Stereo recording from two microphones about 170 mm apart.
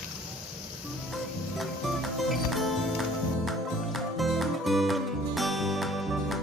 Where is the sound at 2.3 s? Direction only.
Centre (ahead or behind).